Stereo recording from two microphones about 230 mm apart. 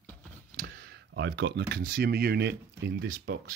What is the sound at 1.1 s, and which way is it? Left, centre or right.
Speech, right.